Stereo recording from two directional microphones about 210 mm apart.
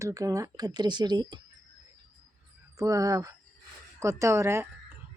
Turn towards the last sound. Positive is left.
turn(degrees=-15)  # may be behind; listen again after turning